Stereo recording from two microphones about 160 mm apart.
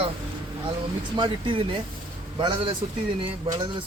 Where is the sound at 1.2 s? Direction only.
30° right (ahead or behind).